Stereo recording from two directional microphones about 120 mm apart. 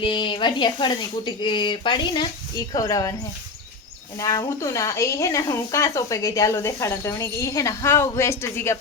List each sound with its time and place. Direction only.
0.0 s speech: 40° left (ahead or behind)
4.2 s speech: 30° left (ahead or behind)